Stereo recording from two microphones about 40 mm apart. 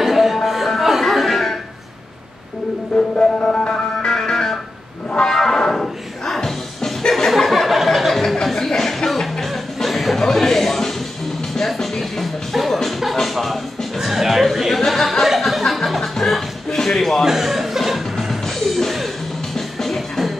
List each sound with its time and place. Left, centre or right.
0.0 s music: centre
2.9 s music: centre
10.3 s a sound: centre
11.5 s music: centre
14.8 s a sound: centre
15.2 s music: centre
17.2 s chuckle: centre
18.3 s music: centre